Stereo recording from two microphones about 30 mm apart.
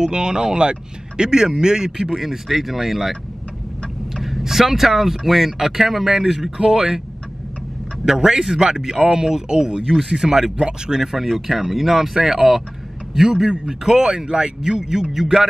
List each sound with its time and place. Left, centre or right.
0.0 s speech: right
2.0 s speech: centre
6.6 s speech: right
8.0 s speech: right
11.4 s speech: centre
13.3 s speech: right